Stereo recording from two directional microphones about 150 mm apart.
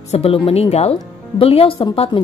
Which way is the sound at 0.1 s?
40° left (ahead or behind).